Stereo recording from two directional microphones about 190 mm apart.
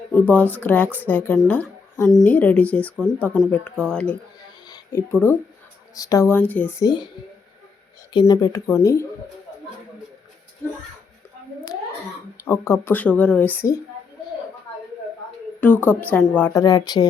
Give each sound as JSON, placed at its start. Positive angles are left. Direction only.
{"t": 0.1, "sound": "a woman's voice", "side_deg": 10}
{"t": 4.6, "sound": "a sound", "side_deg": 15}
{"t": 5.9, "sound": "a woman's voice", "side_deg": 20}
{"t": 8.1, "sound": "a woman's voice", "side_deg": 20}
{"t": 12.5, "sound": "a woman's voice", "side_deg": 15}
{"t": 15.6, "sound": "a woman's voice", "side_deg": 10}